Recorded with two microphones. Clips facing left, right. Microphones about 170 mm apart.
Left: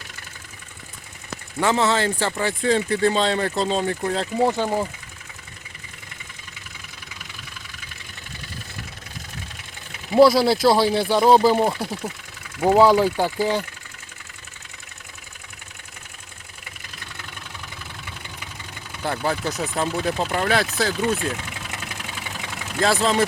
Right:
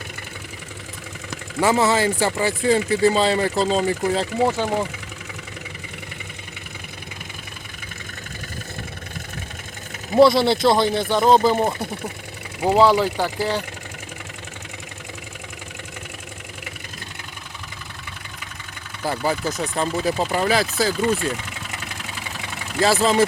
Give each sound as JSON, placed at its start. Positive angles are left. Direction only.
{"t": 1.6, "sound": "speech", "side_deg": -5}
{"t": 4.4, "sound": "speech", "side_deg": 15}
{"t": 10.1, "sound": "speech", "side_deg": 0}
{"t": 19.0, "sound": "speech", "side_deg": -5}
{"t": 22.8, "sound": "speech", "side_deg": -5}